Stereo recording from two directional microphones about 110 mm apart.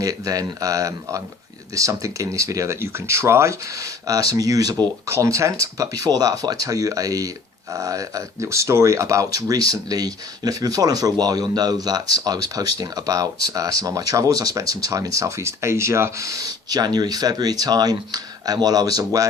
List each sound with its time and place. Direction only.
0.0 s speech: 35° right (ahead or behind)